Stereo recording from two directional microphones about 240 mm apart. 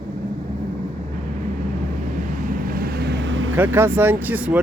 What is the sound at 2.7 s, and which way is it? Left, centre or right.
Vehicle, right.